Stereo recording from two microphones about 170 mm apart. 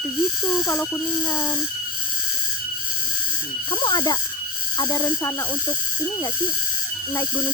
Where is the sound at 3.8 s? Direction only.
25° left (ahead or behind).